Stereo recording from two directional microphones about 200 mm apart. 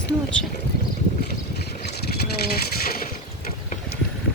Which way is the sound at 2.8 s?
50° left (ahead or behind).